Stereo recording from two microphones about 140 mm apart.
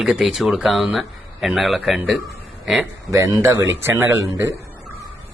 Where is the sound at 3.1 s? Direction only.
20° right (ahead or behind).